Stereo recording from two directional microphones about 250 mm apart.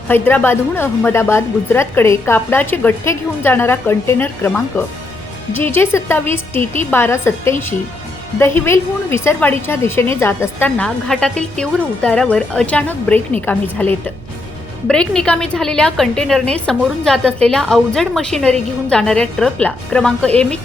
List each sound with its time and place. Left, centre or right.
0.1 s a woman's voice: centre
14.8 s a woman's voice: centre